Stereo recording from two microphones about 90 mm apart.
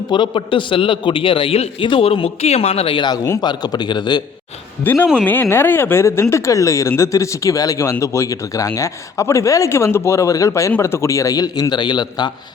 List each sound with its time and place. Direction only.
0.1 s a man's voice: 65° left (ahead or behind); by 3.0 s 90° left
3.4 s speech: 50° left (ahead or behind)
4.8 s a man's voice: 20° left (ahead or behind); by 12.3 s 55° left (ahead or behind)